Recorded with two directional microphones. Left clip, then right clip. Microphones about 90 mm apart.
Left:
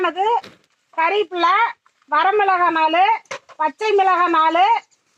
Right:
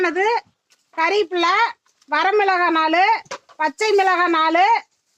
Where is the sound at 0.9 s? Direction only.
30° right (ahead or behind).